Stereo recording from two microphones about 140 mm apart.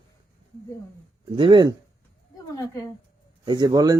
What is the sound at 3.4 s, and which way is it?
Speech, 30° right (ahead or behind).